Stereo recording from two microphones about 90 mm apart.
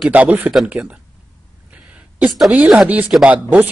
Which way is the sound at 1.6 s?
15° right (ahead or behind).